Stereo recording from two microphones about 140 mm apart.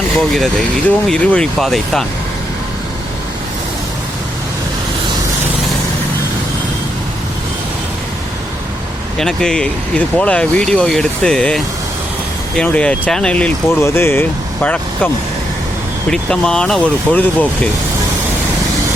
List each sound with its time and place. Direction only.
0.2 s speech: 5° left (ahead or behind)
9.1 s speech: 5° left (ahead or behind)
13.7 s speech: 15° left (ahead or behind)